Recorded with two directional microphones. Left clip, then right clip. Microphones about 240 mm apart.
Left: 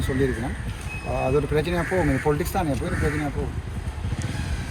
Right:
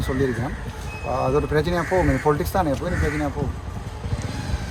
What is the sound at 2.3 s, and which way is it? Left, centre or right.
Speech, centre.